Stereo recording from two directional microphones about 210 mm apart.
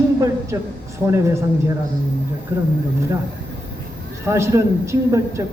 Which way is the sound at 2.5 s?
10° right (ahead or behind).